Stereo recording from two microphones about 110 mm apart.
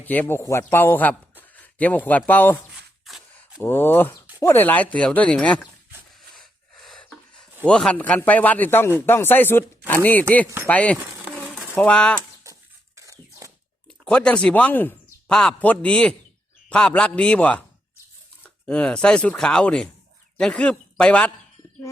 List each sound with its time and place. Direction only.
0.0 s a man's voice: 15° left (ahead or behind)
3.6 s speech: 20° left (ahead or behind)
6.3 s gasp: centre (ahead or behind)
7.7 s speech: 10° left (ahead or behind)
10.9 s insect: 15° right (ahead or behind)
11.8 s speech: 10° left (ahead or behind)
13.0 s a sound: 30° right (ahead or behind)
13.8 s speech: 10° left (ahead or behind)